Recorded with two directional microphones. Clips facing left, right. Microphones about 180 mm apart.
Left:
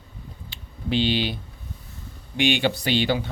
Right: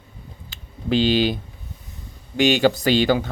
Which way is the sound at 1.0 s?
45° right (ahead or behind).